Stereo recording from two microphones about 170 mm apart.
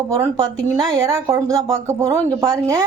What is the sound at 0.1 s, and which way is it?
Speech, 20° right (ahead or behind).